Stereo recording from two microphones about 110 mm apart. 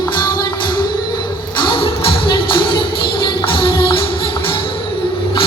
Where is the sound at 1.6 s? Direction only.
50° left (ahead or behind).